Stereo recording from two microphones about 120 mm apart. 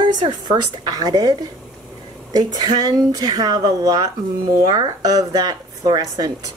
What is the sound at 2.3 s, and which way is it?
Speech, 35° right (ahead or behind).